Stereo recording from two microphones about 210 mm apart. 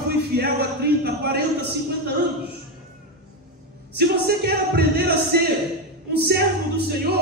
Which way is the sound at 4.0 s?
50° right (ahead or behind).